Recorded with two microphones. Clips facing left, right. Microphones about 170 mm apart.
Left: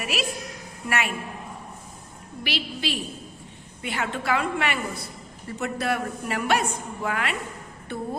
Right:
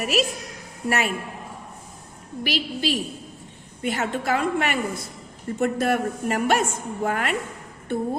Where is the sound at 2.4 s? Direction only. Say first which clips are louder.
Right 4 dB; 40° right (ahead or behind).